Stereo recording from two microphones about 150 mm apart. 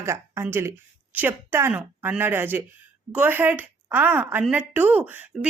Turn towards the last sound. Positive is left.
turn(degrees=-10)  # may be behind; listen again after turning